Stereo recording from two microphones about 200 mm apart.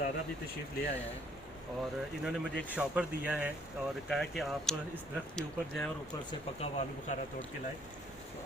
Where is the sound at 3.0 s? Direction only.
5° right (ahead or behind).